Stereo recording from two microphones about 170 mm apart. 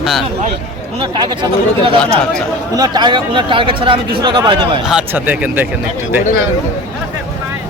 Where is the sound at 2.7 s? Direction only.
25° right (ahead or behind).